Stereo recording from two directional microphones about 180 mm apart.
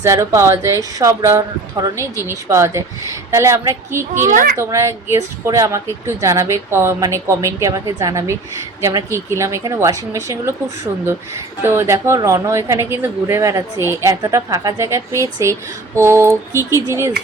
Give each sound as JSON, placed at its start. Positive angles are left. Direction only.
{"t": 0.0, "sound": "speech", "side_deg": -15}
{"t": 4.1, "sound": "a child's voice", "side_deg": -45}
{"t": 4.5, "sound": "speech", "side_deg": -15}
{"t": 11.6, "sound": "speech", "side_deg": -15}